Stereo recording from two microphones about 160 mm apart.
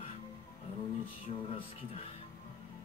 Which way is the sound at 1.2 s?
35° left (ahead or behind).